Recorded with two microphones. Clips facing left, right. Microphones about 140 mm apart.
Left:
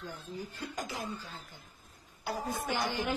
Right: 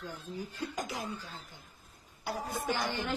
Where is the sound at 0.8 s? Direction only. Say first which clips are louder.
Even; 15° right (ahead or behind).